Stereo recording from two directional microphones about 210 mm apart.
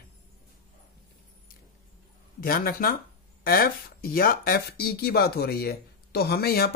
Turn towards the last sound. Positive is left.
turn(degrees=45)  # may be behind; listen again after turning